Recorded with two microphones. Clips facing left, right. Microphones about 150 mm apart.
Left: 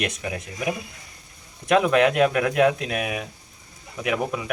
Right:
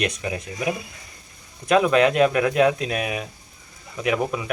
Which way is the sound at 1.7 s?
5° left (ahead or behind).